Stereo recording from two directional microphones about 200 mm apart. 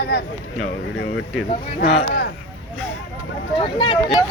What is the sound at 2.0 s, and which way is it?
Speech, 55° left (ahead or behind).